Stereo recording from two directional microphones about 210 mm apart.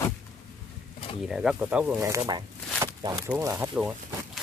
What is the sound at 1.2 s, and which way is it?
Speech, centre (ahead or behind).